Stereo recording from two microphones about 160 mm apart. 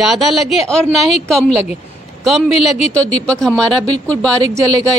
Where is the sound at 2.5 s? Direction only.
40° left (ahead or behind).